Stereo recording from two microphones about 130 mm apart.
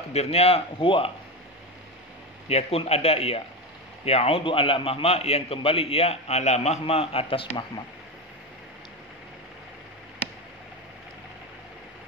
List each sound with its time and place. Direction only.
0.1 s a man's voice: 55° left (ahead or behind)
2.4 s a man's voice: 50° left (ahead or behind)